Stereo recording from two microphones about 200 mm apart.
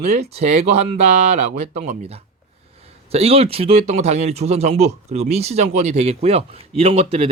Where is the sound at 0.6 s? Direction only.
35° right (ahead or behind).